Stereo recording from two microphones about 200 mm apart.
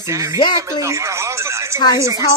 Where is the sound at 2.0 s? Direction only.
15° right (ahead or behind).